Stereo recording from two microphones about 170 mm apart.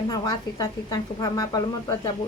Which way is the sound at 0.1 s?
20° left (ahead or behind).